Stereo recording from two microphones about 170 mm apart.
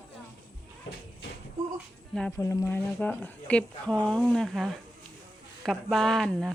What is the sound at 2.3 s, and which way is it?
Speech, 15° left (ahead or behind).